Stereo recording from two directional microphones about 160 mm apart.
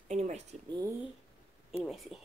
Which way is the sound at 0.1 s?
45° right (ahead or behind).